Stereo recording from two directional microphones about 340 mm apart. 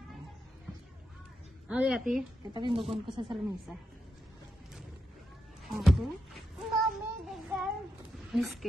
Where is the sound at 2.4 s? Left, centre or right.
Centre.